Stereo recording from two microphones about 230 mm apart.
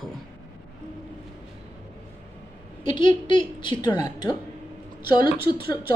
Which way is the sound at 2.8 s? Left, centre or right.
Centre.